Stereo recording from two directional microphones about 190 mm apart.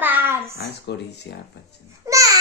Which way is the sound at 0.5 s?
60° left (ahead or behind).